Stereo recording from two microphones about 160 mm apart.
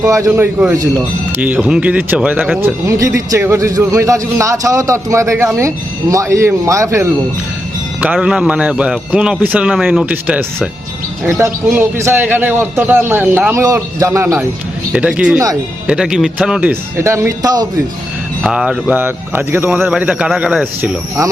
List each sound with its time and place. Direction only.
0.0 s a man's voice: 20° right (ahead or behind)
8.0 s speech: 5° right (ahead or behind)
14.9 s speech: 5° right (ahead or behind); by 17.7 s 25° right (ahead or behind)
18.4 s speech: 5° right (ahead or behind)